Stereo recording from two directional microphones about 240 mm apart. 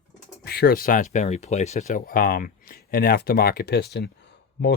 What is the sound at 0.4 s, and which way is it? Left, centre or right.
Speech, left.